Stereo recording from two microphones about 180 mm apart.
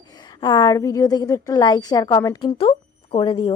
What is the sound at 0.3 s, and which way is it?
A woman's voice, 20° left (ahead or behind).